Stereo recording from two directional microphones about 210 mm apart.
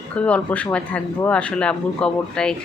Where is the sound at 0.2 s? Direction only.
5° left (ahead or behind).